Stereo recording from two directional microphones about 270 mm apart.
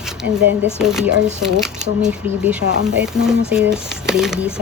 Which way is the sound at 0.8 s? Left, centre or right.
Centre.